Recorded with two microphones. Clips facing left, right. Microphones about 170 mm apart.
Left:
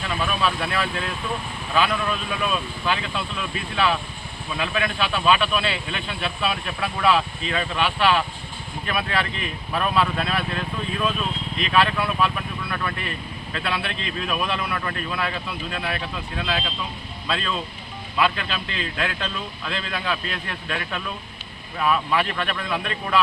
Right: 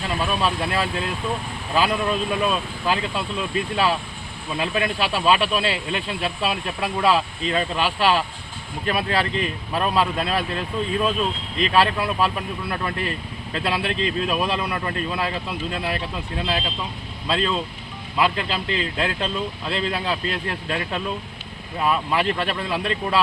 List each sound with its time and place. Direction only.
0.1 s speech: 35° right (ahead or behind)
4.6 s speech: 35° right (ahead or behind)
14.7 s speech: 25° right (ahead or behind)